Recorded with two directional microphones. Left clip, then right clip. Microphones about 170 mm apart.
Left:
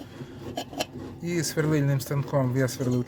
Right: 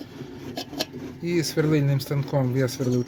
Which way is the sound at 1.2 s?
20° right (ahead or behind).